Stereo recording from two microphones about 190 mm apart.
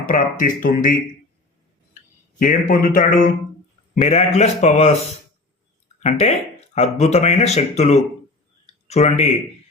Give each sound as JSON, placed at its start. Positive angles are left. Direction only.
{"t": 0.0, "sound": "speech", "side_deg": 45}
{"t": 2.4, "sound": "speech", "side_deg": 45}
{"t": 8.6, "sound": "a sound", "side_deg": 35}